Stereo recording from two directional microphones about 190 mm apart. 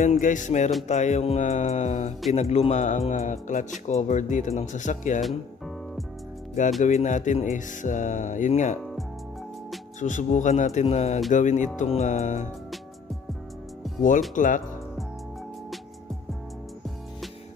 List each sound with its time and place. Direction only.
0.0 s speech: 40° left (ahead or behind)
6.8 s speech: 40° left (ahead or behind)
9.9 s speech: 40° left (ahead or behind)
14.3 s speech: 45° left (ahead or behind)